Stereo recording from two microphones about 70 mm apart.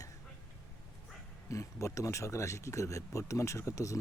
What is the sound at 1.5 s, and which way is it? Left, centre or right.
Speech, left.